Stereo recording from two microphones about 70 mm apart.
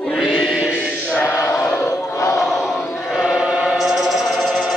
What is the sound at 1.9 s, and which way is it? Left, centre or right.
Crowd, left.